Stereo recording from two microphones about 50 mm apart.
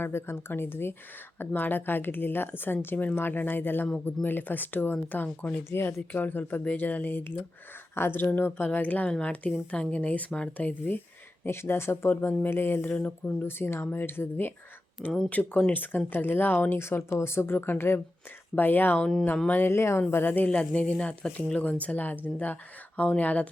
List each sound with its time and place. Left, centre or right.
0.0 s a woman's voice: left
6.1 s speech: left
9.0 s speech: centre
11.4 s a woman's voice: left
13.0 s speech: left
13.4 s a woman's voice: left
15.3 s a woman's voice: left
18.5 s speech: left
18.9 s speech: centre
19.5 s speech: left
20.1 s a woman's voice: left
20.5 s speech: left